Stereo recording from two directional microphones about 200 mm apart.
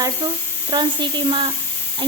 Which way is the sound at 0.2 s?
20° right (ahead or behind).